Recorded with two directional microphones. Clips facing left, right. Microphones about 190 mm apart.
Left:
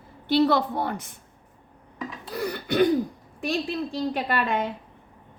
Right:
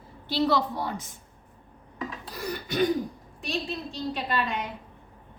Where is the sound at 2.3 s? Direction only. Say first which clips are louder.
Left 6 dB; 60° left (ahead or behind).